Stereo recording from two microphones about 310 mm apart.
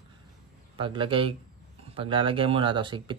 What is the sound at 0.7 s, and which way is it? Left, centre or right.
Speech, centre.